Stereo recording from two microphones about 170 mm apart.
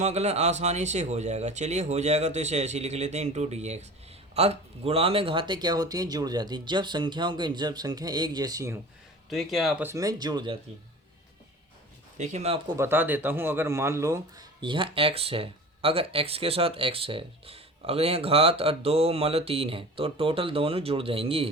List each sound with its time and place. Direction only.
0.0 s speech: 40° right (ahead or behind); by 8.8 s 20° right (ahead or behind)
9.3 s speech: centre (ahead or behind)
9.8 s speech: 20° right (ahead or behind)
12.1 s speech: 45° right (ahead or behind)
12.7 s speech: 15° right (ahead or behind); by 21.5 s 35° right (ahead or behind)